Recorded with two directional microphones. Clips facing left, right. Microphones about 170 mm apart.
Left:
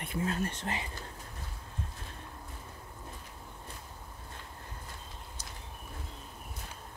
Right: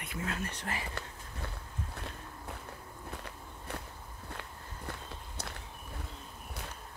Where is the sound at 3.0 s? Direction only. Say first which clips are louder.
Right 3 dB; 70° right (ahead or behind).